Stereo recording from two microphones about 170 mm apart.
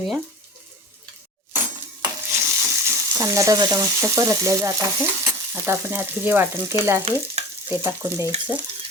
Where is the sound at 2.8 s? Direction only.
20° right (ahead or behind).